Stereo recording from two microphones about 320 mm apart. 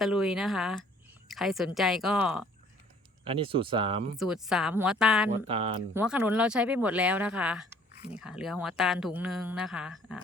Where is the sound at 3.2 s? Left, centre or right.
Centre.